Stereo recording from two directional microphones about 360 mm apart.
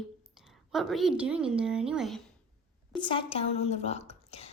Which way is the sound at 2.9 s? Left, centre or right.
Centre.